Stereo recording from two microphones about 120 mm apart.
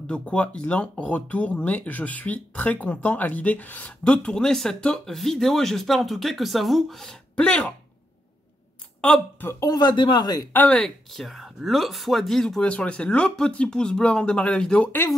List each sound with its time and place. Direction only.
0.0 s speech: 10° left (ahead or behind)
9.0 s speech: 5° left (ahead or behind)
9.5 s speech: 30° left (ahead or behind)
10.5 s speech: 10° left (ahead or behind)